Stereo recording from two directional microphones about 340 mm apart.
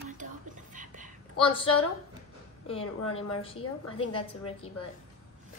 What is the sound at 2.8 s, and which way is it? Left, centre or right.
Speech, left.